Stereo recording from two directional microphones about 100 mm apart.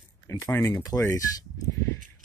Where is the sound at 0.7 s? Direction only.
35° left (ahead or behind).